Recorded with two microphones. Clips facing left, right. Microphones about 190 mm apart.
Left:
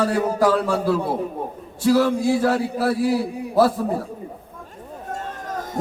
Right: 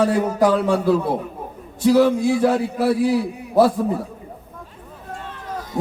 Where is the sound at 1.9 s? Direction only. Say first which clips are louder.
Right 2 dB; 20° right (ahead or behind).